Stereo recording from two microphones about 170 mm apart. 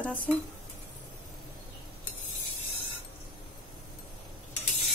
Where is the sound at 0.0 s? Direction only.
10° left (ahead or behind).